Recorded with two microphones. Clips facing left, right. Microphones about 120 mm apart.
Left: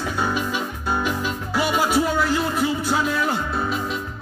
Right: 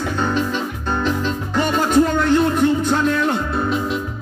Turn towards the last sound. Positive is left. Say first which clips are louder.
# right 4 dB
turn(degrees=0)  # may be behind; listen again after turning